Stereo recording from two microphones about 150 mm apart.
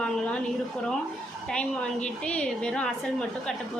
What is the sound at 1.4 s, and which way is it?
A woman's voice, 5° left (ahead or behind).